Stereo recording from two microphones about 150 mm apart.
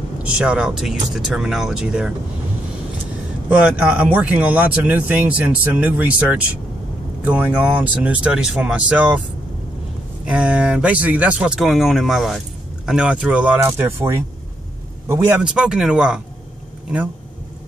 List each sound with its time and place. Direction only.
0.2 s speech: 5° right (ahead or behind)
3.4 s speech: 10° right (ahead or behind)
10.2 s speech: 10° right (ahead or behind)